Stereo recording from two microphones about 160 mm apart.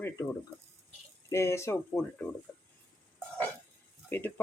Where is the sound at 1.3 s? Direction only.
20° left (ahead or behind).